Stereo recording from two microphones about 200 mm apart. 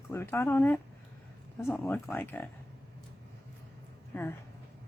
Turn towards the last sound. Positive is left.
turn(degrees=15)  # may be behind; listen again after turning